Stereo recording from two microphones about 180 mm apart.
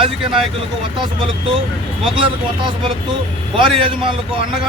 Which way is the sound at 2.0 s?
30° right (ahead or behind).